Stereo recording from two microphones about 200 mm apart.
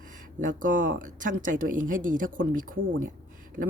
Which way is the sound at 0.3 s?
40° right (ahead or behind).